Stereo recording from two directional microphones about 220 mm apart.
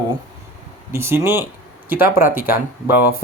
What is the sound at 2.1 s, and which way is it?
Speech, 40° left (ahead or behind).